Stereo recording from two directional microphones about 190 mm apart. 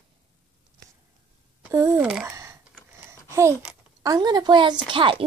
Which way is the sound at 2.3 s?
15° right (ahead or behind).